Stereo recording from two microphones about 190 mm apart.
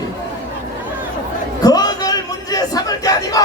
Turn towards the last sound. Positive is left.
turn(degrees=20)  # may be behind; listen again after turning